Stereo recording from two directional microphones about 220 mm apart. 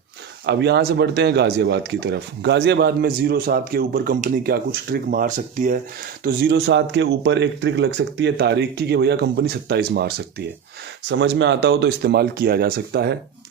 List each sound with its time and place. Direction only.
0.4 s speech: 50° right (ahead or behind)
11.1 s speech: 55° right (ahead or behind)